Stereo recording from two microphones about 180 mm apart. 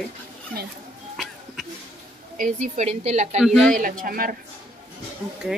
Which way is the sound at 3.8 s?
50° right (ahead or behind).